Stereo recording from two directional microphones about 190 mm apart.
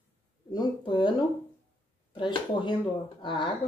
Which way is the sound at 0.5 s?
25° left (ahead or behind).